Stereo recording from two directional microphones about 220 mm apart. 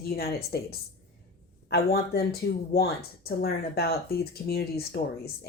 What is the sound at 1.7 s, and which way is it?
Speech, 45° left (ahead or behind).